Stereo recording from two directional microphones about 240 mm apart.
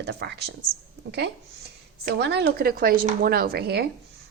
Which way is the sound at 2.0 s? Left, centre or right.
Right.